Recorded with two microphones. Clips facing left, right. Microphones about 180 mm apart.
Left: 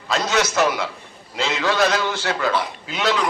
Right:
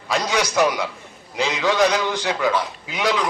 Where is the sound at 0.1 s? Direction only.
15° right (ahead or behind).